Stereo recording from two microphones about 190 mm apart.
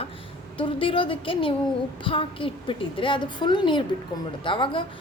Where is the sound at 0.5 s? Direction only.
25° left (ahead or behind).